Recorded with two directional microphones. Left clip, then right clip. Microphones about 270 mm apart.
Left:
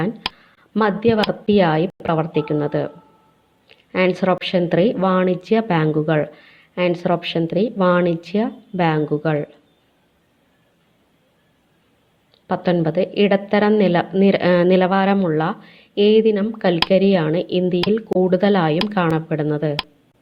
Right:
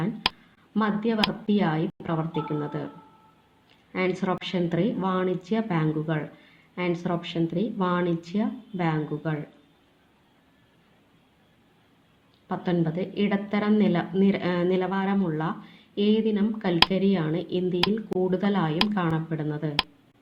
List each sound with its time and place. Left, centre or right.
0.2 s a sound: centre
0.7 s speech: left
3.9 s speech: left
12.5 s speech: left